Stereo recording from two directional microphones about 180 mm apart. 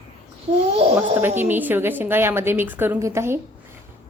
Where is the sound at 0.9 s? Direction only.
10° right (ahead or behind).